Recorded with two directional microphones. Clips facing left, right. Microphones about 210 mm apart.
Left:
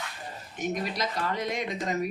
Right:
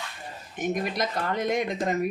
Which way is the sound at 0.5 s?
50° right (ahead or behind).